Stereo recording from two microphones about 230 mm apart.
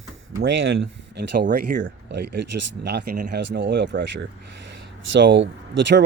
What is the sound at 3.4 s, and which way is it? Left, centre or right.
Speech, right.